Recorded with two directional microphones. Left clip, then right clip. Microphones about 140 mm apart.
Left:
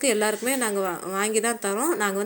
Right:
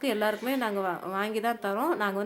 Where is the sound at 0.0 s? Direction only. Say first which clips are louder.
Left 5 dB; 20° left (ahead or behind).